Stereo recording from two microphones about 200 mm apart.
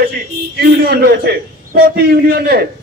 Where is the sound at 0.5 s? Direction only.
50° right (ahead or behind).